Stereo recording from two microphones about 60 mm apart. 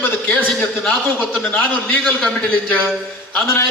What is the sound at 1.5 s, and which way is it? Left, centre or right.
Speech, left.